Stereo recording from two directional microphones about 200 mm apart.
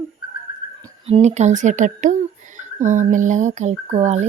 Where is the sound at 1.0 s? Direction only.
35° right (ahead or behind).